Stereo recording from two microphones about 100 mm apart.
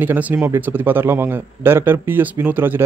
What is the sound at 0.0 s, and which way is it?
A man's voice, 20° right (ahead or behind).